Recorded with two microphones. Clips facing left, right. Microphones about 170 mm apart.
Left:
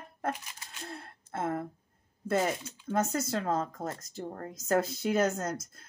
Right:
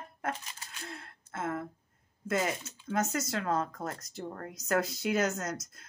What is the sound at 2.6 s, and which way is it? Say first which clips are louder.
Speech: left 2 dB; 30° left (ahead or behind).